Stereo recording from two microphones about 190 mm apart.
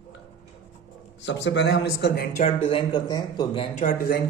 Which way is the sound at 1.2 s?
65° left (ahead or behind).